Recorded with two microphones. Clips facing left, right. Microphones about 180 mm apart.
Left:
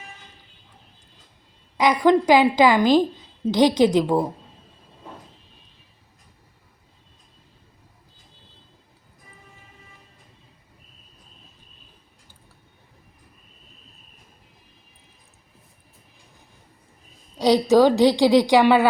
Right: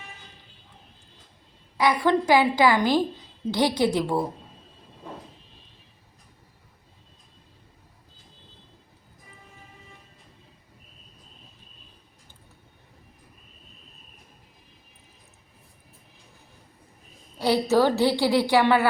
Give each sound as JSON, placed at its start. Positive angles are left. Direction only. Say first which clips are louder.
{"t": 1.8, "sound": "a woman's voice", "louder": "left 4 dB", "side_deg": 20}
{"t": 17.3, "sound": "a woman's voice", "louder": "left 5 dB", "side_deg": 15}